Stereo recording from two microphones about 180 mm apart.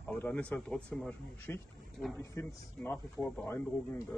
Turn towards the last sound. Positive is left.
turn(degrees=10)  # may be behind; listen again after turning